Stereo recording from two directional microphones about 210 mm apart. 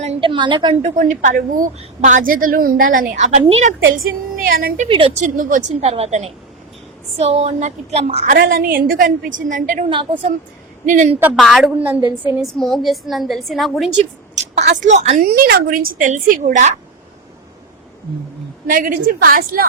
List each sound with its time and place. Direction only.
0.0 s a woman's voice: 25° right (ahead or behind)
4.4 s speech: 45° right (ahead or behind)
4.9 s a woman's voice: 25° right (ahead or behind)
5.4 s a woman's voice: 40° right (ahead or behind)
8.4 s a woman's voice: 45° right (ahead or behind)
10.8 s a woman's voice: 35° right (ahead or behind)
11.2 s a woman's voice: 5° right (ahead or behind)
11.8 s a woman's voice: 10° right (ahead or behind)
12.5 s a woman's voice: centre (ahead or behind)
14.0 s a woman's voice: 30° right (ahead or behind)
18.7 s a woman's voice: 40° right (ahead or behind)